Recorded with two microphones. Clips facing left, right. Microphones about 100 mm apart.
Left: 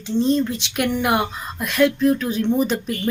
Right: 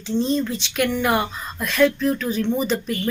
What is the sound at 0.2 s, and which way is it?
Speech, centre (ahead or behind).